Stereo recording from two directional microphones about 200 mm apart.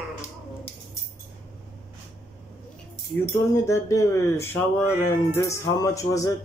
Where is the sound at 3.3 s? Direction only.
15° left (ahead or behind).